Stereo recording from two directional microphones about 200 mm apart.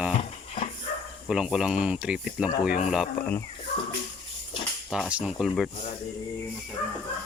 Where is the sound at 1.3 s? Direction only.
5° right (ahead or behind).